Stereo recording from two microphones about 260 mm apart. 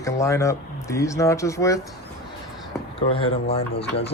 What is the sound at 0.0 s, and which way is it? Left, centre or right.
Speech, centre.